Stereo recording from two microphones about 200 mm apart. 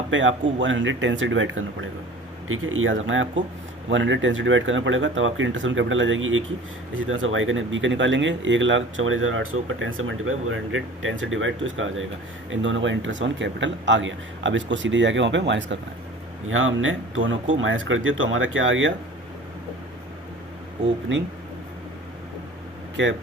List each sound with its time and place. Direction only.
0.1 s speech: 70° right (ahead or behind)
2.5 s speech: 90° right; by 15.8 s 65° right (ahead or behind)
16.5 s speech: 80° right
21.1 s speech: 65° right (ahead or behind)